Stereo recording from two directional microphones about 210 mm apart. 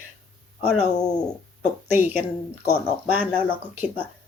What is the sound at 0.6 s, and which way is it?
Speech, 30° left (ahead or behind).